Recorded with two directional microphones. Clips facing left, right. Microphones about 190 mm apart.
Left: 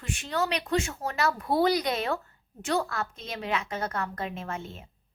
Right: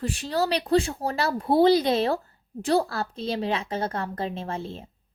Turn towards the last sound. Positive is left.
turn(degrees=-30)  # may be behind; listen again after turning